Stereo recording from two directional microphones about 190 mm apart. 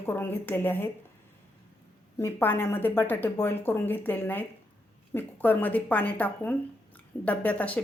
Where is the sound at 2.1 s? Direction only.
10° left (ahead or behind).